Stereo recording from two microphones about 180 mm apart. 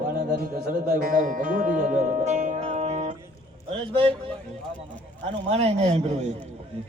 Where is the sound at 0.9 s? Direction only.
50° right (ahead or behind).